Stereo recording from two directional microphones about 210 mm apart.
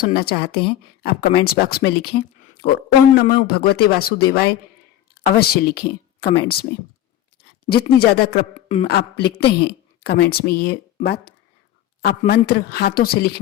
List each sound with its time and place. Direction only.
0.0 s speech: 45° left (ahead or behind)
7.9 s speech: 45° left (ahead or behind)